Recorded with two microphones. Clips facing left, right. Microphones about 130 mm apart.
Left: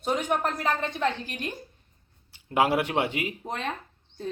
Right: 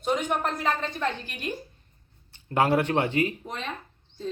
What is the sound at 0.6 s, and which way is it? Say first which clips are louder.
Speech: even; 15° left (ahead or behind).